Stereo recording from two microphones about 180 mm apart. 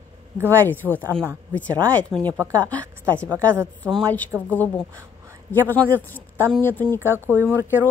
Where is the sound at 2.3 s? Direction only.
20° right (ahead or behind).